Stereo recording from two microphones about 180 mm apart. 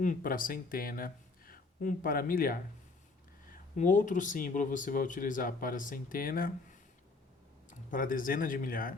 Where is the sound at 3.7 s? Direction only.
45° left (ahead or behind).